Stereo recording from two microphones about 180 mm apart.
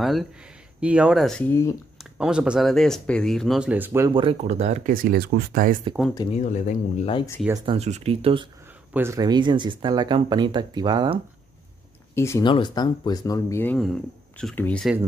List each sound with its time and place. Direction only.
0.0 s speech: centre (ahead or behind)
1.5 s speech: 15° left (ahead or behind)
2.1 s speech: 5° right (ahead or behind)
4.1 s speech: 25° right (ahead or behind)
4.4 s speech: 40° right (ahead or behind)
6.0 s speech: 5° right (ahead or behind)
6.3 s speech: 45° left (ahead or behind)
7.6 s speech: 35° right (ahead or behind)
8.9 s speech: 15° right (ahead or behind)
12.2 s speech: 15° left (ahead or behind)
12.4 s speech: 25° left (ahead or behind); by 14.9 s 10° left (ahead or behind)